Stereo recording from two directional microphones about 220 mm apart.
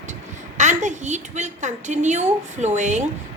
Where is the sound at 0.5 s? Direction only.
35° right (ahead or behind).